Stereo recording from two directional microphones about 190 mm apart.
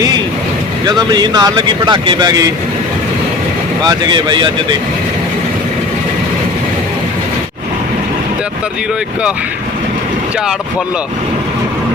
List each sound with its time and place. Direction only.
0.9 s speech: 20° right (ahead or behind)
3.8 s speech: 20° right (ahead or behind)